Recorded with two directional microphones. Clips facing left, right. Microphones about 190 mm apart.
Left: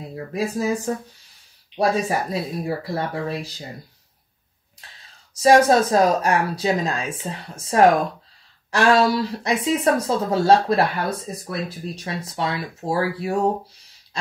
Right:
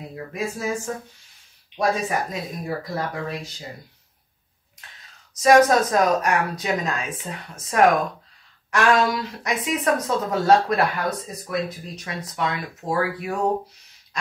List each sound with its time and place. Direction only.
0.1 s speech: 35° left (ahead or behind)
4.8 s whispering: 30° left (ahead or behind)
5.4 s speech: 30° left (ahead or behind)